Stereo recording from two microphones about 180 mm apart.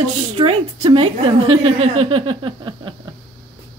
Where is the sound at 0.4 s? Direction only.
30° right (ahead or behind).